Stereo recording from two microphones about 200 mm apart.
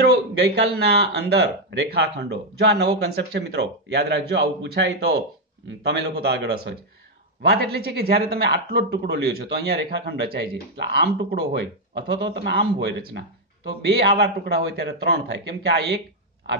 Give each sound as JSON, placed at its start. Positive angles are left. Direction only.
{"t": 0.0, "sound": "a man's voice", "side_deg": -55}